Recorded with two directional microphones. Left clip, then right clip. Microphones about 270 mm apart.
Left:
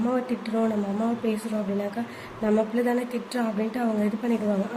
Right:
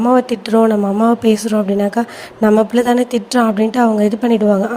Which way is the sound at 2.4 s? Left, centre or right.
Right.